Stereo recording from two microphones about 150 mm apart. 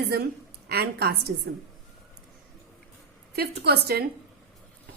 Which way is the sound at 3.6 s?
90° right.